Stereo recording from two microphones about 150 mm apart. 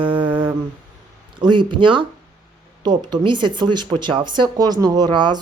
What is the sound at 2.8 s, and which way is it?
Speech, 30° right (ahead or behind).